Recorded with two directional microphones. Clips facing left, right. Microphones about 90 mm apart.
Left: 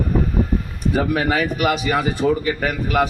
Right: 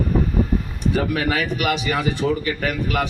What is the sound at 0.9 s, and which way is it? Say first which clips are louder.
A man's voice: left 3 dB; 35° left (ahead or behind).